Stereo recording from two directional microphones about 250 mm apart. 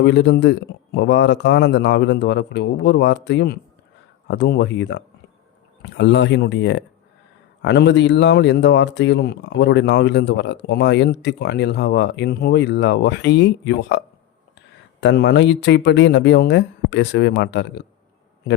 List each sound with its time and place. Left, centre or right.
0.0 s speech: left
15.0 s speech: left